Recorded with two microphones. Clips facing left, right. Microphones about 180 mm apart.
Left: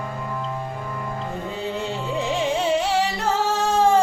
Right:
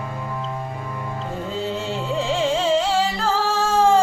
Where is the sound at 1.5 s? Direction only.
15° left (ahead or behind).